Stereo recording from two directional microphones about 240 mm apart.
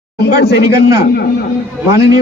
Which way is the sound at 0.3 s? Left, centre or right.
Left.